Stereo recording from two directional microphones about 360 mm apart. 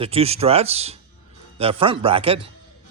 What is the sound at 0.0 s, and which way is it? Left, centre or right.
Speech, centre.